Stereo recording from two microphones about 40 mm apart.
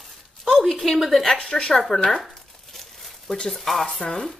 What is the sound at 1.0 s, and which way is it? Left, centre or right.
Speech, centre.